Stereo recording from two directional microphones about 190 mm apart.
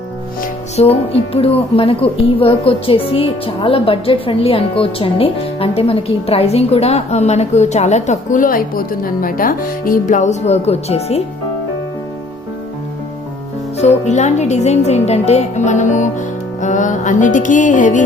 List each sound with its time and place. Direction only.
0.4 s speech: 30° left (ahead or behind)
14.0 s speech: 35° left (ahead or behind)